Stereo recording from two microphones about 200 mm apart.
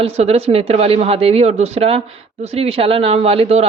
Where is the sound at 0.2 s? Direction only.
30° right (ahead or behind).